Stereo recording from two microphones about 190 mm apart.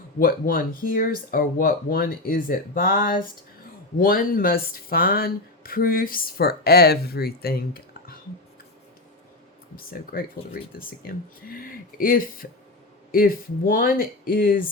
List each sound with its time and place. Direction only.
0.2 s speech: 50° left (ahead or behind)
9.7 s speech: 50° left (ahead or behind)